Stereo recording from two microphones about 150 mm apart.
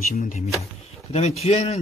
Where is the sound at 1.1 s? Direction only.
45° left (ahead or behind).